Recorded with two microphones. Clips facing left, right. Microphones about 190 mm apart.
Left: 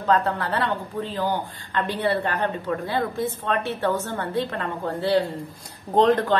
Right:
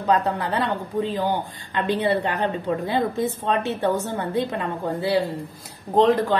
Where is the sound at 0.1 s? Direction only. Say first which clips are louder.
Even; 15° right (ahead or behind).